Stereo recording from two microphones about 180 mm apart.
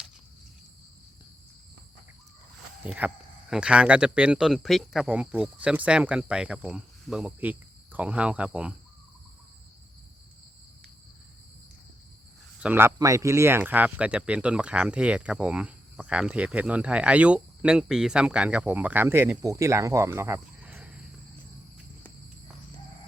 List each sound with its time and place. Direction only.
2.8 s speech: 5° right (ahead or behind)
12.6 s speech: 10° right (ahead or behind)